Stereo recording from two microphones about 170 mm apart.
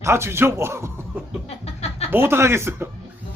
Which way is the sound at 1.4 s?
40° left (ahead or behind).